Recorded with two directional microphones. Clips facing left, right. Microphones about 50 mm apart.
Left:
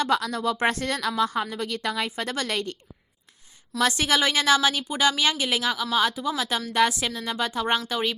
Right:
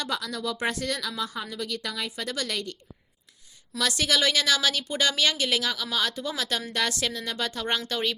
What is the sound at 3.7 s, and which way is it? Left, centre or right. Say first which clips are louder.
A woman's voice: left 3 dB; left.